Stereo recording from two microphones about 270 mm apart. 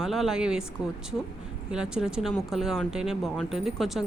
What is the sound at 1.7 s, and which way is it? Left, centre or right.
Speech, centre.